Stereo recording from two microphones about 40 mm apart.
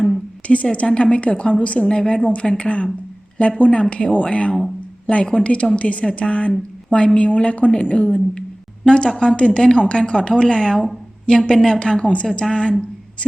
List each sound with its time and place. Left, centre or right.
0.4 s a woman's voice: left
1.9 s a woman's voice: left